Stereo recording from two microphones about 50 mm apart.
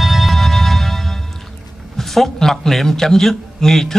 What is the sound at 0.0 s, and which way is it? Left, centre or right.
Music, centre.